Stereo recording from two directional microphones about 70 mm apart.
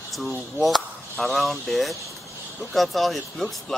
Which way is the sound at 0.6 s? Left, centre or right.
Centre.